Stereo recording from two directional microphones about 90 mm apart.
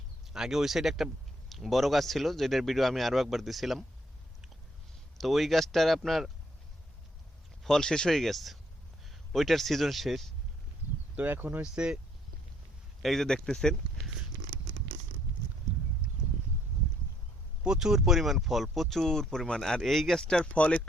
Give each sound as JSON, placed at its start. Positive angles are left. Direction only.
{"t": 0.3, "sound": "speech", "side_deg": -5}
{"t": 5.1, "sound": "speech", "side_deg": 0}
{"t": 7.6, "sound": "speech", "side_deg": 5}
{"t": 11.2, "sound": "speech", "side_deg": -20}
{"t": 11.7, "sound": "speech", "side_deg": -10}
{"t": 13.0, "sound": "speech", "side_deg": 5}
{"t": 17.6, "sound": "speech", "side_deg": -5}